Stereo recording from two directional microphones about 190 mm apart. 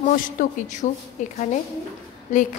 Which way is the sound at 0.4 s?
40° left (ahead or behind).